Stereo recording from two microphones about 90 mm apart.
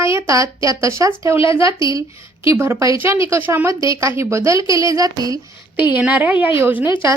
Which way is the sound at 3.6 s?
35° right (ahead or behind).